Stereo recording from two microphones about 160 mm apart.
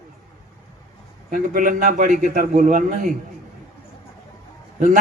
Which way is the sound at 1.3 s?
55° right (ahead or behind).